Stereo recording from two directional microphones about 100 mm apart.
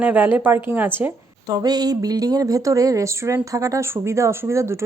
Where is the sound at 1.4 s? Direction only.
40° right (ahead or behind).